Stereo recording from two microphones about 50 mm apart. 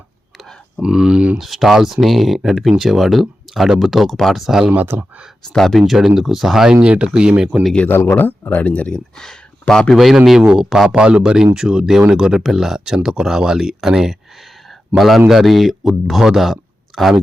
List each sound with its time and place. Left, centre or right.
0.8 s speech: centre
1.4 s speech: centre
4.9 s speech: right
5.5 s speech: centre
5.8 s speech: centre
6.8 s speech: right
7.9 s speech: left
9.1 s speech: centre
9.9 s speech: centre
10.4 s speech: centre